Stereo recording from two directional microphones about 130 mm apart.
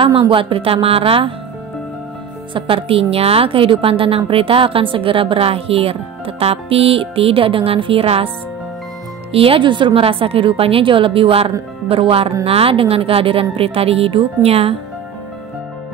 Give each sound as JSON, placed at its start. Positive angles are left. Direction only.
{"t": 0.0, "sound": "a woman's voice", "side_deg": -40}
{"t": 2.5, "sound": "a woman's voice", "side_deg": -45}
{"t": 9.3, "sound": "a woman's voice", "side_deg": -45}